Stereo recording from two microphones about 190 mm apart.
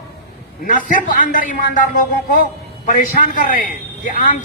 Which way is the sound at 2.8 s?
45° left (ahead or behind).